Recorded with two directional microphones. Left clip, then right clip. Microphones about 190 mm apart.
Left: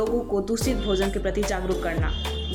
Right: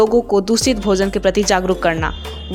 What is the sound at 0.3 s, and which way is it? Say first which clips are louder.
Speech: right 10 dB; 40° right (ahead or behind).